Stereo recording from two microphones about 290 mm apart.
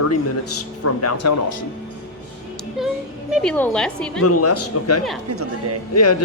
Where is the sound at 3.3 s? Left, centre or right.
Centre.